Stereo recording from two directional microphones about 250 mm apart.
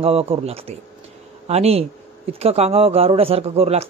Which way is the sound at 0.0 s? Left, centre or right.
Right.